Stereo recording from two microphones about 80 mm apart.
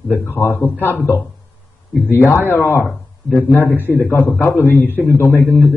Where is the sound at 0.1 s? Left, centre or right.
Left.